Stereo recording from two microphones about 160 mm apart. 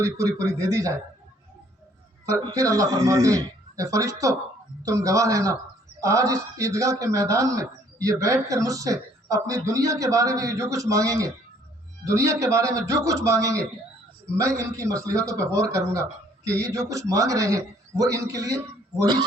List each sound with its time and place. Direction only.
0.0 s speech: 20° right (ahead or behind)
2.4 s speech: 20° right (ahead or behind)